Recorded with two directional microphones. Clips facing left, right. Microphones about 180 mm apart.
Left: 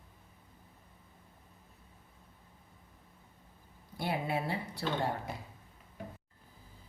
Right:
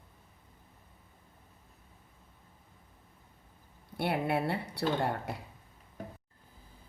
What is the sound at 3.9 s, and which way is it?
Speech, 65° right (ahead or behind).